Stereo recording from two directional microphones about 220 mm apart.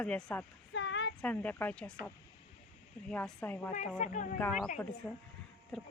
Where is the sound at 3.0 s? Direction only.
5° left (ahead or behind).